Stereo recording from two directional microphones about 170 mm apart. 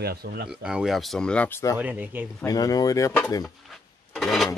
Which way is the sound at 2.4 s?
20° left (ahead or behind).